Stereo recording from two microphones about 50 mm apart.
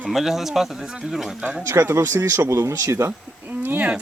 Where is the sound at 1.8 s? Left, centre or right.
Right.